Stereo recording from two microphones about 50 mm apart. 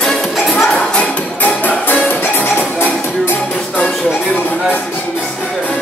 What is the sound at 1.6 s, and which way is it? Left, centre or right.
Music, left.